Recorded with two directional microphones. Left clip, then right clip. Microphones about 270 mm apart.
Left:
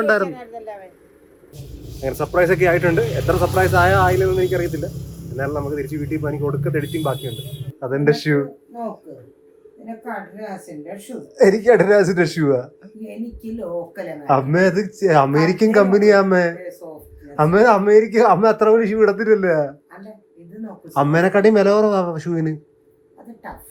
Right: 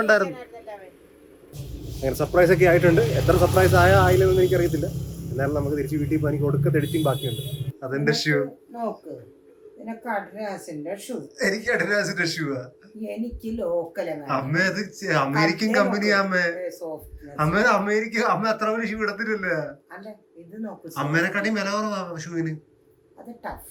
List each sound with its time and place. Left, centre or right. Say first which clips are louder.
0.0 s speech: left 2 dB; centre
0.3 s a sound: left 6 dB; left
1.5 s speech: left 1 dB; centre
11.2 s speech: left 12 dB; centre
14.3 s speech: left 9 dB; centre
16.8 s speech: right 3 dB; centre
17.3 s speech: left 7 dB; centre
20.9 s speech: left 8 dB; centre